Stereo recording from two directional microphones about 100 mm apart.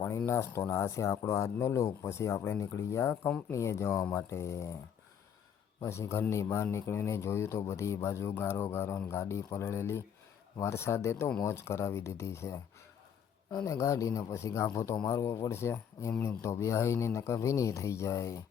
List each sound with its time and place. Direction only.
0.0 s a man's voice: 25° left (ahead or behind)
3.1 s speech: 15° left (ahead or behind)
3.5 s a man's voice: 30° left (ahead or behind)
5.8 s a man's voice: 25° left (ahead or behind)
13.7 s a man's voice: 30° left (ahead or behind)